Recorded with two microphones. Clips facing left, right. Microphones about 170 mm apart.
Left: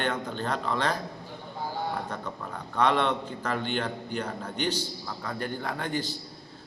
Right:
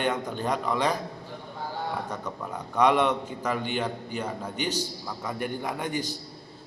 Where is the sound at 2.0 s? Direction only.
15° right (ahead or behind).